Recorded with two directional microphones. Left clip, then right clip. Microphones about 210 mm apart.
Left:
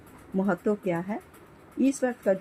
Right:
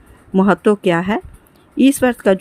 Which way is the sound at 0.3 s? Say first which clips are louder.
Right 13 dB; 40° right (ahead or behind).